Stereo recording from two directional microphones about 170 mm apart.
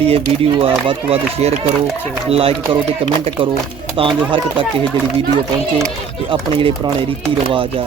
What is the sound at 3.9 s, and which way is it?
Speech, 30° right (ahead or behind).